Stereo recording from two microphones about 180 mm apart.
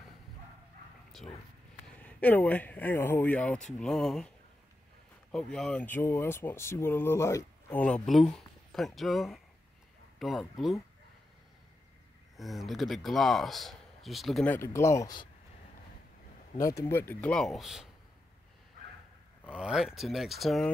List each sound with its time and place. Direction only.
2.0 s speech: 5° left (ahead or behind)
5.3 s speech: 5° left (ahead or behind)
12.4 s speech: centre (ahead or behind)
14.5 s speech: 15° left (ahead or behind)
16.5 s speech: 20° left (ahead or behind); by 17.8 s centre (ahead or behind)
19.5 s speech: 5° right (ahead or behind)